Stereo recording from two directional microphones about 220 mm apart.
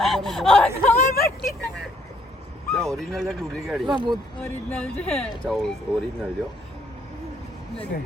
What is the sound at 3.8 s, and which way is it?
Speech, 20° right (ahead or behind).